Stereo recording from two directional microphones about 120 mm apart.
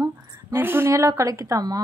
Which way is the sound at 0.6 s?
20° right (ahead or behind).